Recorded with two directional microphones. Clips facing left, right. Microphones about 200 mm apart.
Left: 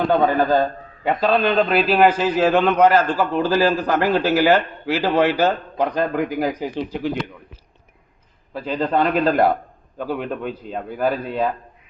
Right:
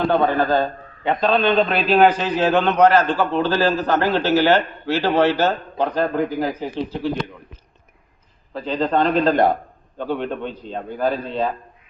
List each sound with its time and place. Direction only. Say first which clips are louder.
0.3 s a man's voice: left 1 dB; 10° left (ahead or behind)
8.5 s a man's voice: even; 10° left (ahead or behind)